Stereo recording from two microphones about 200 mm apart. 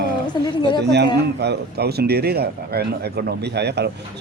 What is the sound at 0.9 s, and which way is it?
Speech, 55° right (ahead or behind).